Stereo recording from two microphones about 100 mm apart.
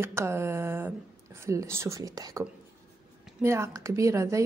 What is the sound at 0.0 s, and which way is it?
A woman's voice, 25° right (ahead or behind).